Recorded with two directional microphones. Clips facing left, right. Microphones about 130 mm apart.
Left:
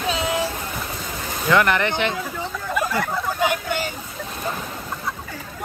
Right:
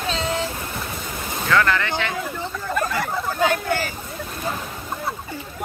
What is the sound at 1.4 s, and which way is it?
Speech, 20° left (ahead or behind).